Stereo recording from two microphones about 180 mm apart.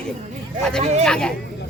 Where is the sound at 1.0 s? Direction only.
5° left (ahead or behind).